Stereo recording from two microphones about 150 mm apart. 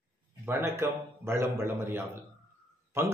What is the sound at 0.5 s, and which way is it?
Speech, 15° right (ahead or behind).